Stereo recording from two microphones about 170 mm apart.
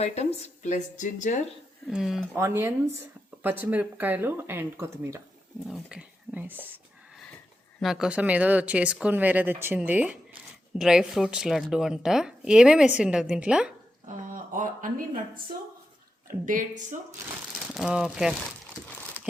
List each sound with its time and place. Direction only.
0.0 s speech: 40° left (ahead or behind)
1.9 s a woman's voice: centre (ahead or behind)
2.3 s speech: 15° right (ahead or behind)
5.6 s speech: 5° right (ahead or behind)
7.8 s a woman's voice: centre (ahead or behind)
14.5 s speech: 50° right (ahead or behind)
16.5 s speech: 50° right (ahead or behind)
17.7 s a woman's voice: centre (ahead or behind)